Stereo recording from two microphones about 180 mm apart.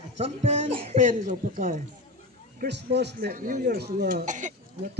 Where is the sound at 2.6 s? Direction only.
70° right (ahead or behind).